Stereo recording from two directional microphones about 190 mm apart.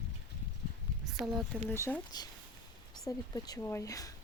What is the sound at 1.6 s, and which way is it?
Speech, 10° left (ahead or behind).